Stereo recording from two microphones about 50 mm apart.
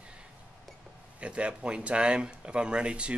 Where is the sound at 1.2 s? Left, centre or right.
Right.